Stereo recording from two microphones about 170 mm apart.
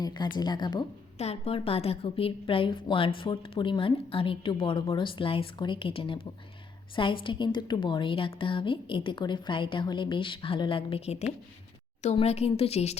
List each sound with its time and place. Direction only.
0.0 s a woman's voice: 25° left (ahead or behind)
1.2 s a woman's voice: 35° left (ahead or behind)